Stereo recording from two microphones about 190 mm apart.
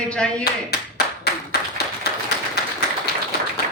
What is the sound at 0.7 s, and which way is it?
Clapping, 55° left (ahead or behind).